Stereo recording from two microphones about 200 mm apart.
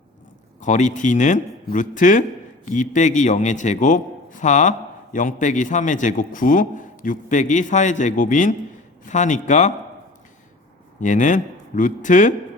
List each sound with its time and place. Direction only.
0.6 s a man's voice: 40° left (ahead or behind)
11.0 s a man's voice: 40° left (ahead or behind)